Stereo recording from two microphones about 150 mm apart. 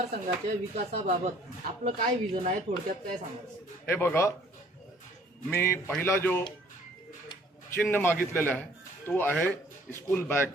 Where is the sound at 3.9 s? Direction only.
15° left (ahead or behind).